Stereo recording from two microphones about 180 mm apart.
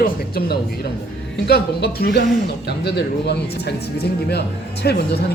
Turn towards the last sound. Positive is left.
turn(degrees=65)  # may be behind; listen again after turning